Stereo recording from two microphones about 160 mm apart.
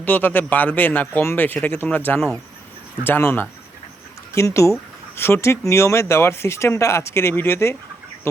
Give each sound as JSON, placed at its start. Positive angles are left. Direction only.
{"t": 0.0, "sound": "speech", "side_deg": 10}
{"t": 2.1, "sound": "speech", "side_deg": 0}
{"t": 3.0, "sound": "speech", "side_deg": 15}